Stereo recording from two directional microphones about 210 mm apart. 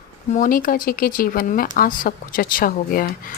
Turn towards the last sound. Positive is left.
turn(degrees=45)  # may be behind; listen again after turning